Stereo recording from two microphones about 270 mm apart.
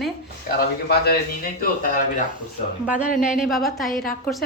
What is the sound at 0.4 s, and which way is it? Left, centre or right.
Speech, left.